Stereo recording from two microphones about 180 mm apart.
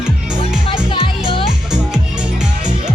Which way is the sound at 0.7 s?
30° left (ahead or behind).